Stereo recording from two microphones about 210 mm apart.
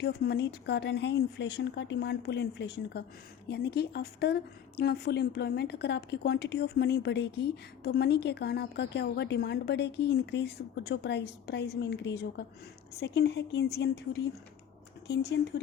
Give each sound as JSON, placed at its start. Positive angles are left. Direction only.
{"t": 0.0, "sound": "a woman's voice", "side_deg": 50}